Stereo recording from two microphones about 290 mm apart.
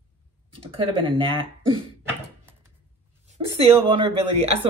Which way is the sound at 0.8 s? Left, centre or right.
Centre.